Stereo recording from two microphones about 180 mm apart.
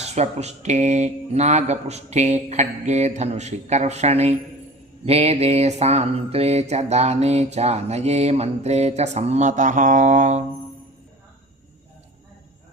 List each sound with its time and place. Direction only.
0.0 s mantra: 35° right (ahead or behind)